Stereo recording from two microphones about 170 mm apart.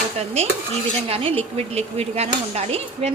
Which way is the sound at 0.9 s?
35° right (ahead or behind).